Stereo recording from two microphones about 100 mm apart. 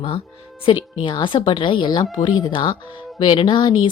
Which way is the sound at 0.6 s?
60° left (ahead or behind).